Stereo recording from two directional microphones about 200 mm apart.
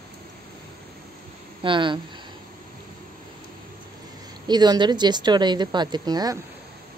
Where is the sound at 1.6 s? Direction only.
25° right (ahead or behind).